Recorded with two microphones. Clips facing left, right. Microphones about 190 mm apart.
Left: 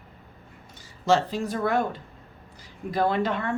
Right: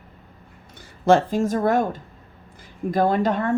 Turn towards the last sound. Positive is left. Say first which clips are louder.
# right 4 dB
turn(degrees=-40)  # may be behind; listen again after turning